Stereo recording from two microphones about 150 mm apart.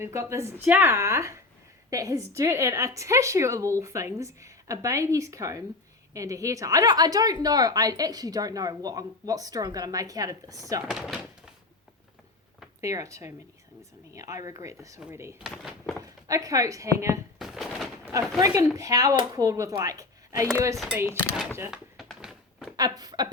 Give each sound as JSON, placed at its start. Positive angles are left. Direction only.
{"t": 0.0, "sound": "a woman's voice", "side_deg": -15}
{"t": 10.8, "sound": "speech", "side_deg": 0}
{"t": 12.8, "sound": "a woman's voice", "side_deg": -20}
{"t": 15.4, "sound": "speech", "side_deg": 0}
{"t": 16.0, "sound": "a woman's voice", "side_deg": -25}
{"t": 17.3, "sound": "a sound", "side_deg": 0}
{"t": 18.3, "sound": "a woman's voice", "side_deg": -20}
{"t": 20.7, "sound": "speech", "side_deg": -5}
{"t": 21.1, "sound": "speech", "side_deg": 15}
{"t": 21.7, "sound": "a sound", "side_deg": -5}
{"t": 22.7, "sound": "speech", "side_deg": -25}